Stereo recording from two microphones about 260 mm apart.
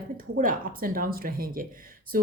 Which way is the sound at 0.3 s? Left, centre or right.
Right.